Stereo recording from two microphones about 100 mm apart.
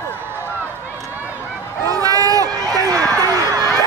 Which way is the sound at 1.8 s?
35° right (ahead or behind).